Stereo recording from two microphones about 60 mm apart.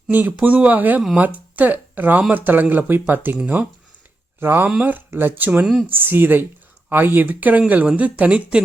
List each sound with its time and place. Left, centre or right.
0.1 s speech: right
4.4 s speech: right; by 8.6 s centre